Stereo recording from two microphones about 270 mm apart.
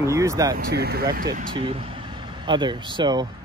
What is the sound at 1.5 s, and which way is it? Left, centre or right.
Speech, centre.